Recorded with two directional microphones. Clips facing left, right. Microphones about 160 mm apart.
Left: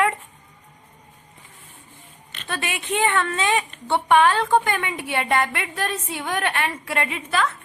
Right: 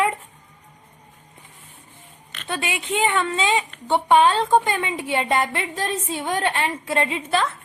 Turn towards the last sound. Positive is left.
turn(degrees=-25)  # may be behind; listen again after turning